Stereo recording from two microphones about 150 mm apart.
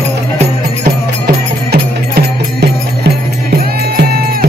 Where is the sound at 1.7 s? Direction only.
90° right.